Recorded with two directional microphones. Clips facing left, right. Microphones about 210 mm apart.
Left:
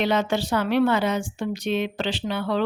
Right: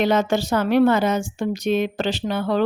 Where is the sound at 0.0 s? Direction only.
45° right (ahead or behind).